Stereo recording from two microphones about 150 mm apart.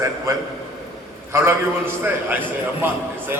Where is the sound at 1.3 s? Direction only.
15° right (ahead or behind).